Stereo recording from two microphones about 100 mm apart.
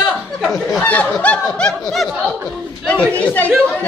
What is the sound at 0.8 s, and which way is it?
Speech, 15° left (ahead or behind).